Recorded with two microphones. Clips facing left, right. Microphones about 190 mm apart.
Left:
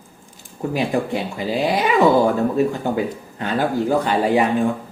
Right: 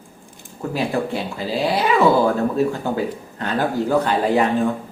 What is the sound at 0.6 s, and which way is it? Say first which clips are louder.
Speech: left 1 dB; 15° left (ahead or behind).